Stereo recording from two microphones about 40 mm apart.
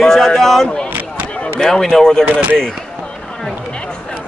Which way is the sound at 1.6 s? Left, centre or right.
Centre.